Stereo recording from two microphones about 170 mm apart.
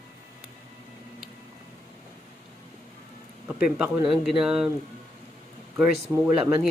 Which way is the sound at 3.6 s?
5° right (ahead or behind).